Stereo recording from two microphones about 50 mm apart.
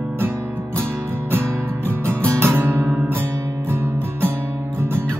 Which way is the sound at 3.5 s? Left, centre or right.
Right.